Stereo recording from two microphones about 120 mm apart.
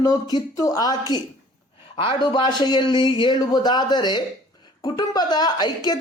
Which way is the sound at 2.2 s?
40° left (ahead or behind).